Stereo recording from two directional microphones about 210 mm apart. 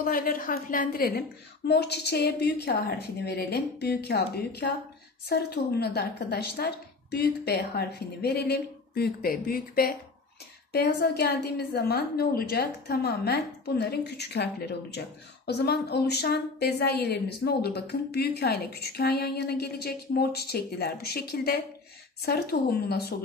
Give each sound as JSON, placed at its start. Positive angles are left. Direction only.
{"t": 0.0, "sound": "a woman's voice", "side_deg": 45}